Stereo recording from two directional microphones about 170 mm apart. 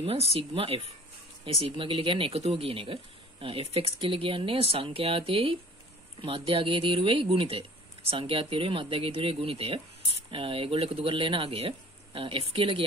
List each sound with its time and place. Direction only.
0.3 s speech: 35° right (ahead or behind)